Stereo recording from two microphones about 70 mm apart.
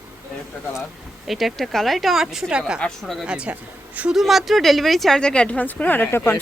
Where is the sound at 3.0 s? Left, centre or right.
Centre.